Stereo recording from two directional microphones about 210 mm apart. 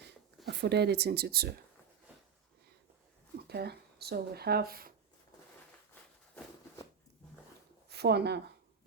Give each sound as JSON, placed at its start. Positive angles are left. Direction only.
{"t": 0.4, "sound": "speech", "side_deg": -50}
{"t": 3.4, "sound": "speech", "side_deg": -50}
{"t": 5.9, "sound": "a sound", "side_deg": 10}
{"t": 7.9, "sound": "speech", "side_deg": -50}